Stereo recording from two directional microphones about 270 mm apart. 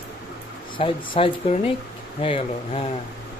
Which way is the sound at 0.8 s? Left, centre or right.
Centre.